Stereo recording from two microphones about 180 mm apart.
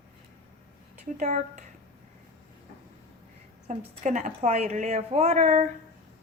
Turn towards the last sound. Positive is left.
turn(degrees=-40)  # may be behind; listen again after turning